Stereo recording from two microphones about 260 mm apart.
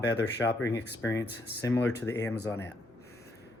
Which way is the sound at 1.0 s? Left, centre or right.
Centre.